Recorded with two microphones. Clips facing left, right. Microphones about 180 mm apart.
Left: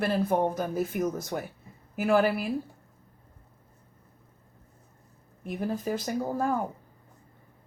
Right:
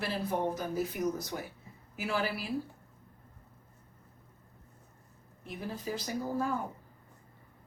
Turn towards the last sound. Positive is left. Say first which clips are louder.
# left 5 dB
turn(degrees=50)  # may be behind; listen again after turning